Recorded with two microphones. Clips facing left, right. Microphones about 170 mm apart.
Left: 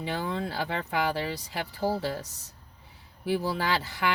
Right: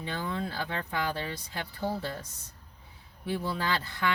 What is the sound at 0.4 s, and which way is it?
Speech, 75° left (ahead or behind).